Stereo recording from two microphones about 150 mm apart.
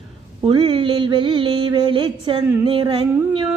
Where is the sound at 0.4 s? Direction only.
35° right (ahead or behind).